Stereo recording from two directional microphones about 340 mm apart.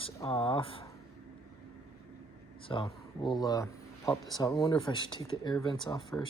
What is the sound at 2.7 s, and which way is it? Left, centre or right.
Speech, centre.